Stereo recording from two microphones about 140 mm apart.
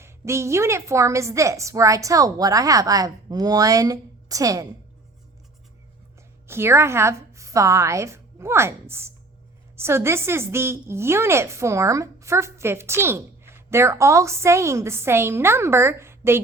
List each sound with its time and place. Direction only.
0.0 s a woman's voice: 20° right (ahead or behind)
6.5 s a woman's voice: 15° right (ahead or behind)